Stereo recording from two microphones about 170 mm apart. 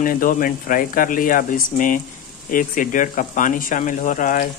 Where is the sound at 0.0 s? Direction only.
55° left (ahead or behind).